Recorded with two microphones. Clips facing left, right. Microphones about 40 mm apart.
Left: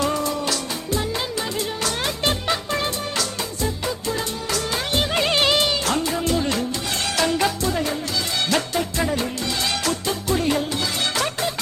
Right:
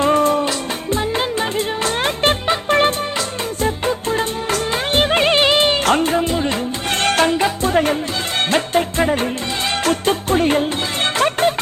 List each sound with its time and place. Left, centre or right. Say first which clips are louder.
0.0 s music: right 8 dB; right
6.1 s music: right 4 dB; right
7.0 s music: right 7 dB; right
7.3 s music: right 4 dB; right
7.7 s music: right 7 dB; right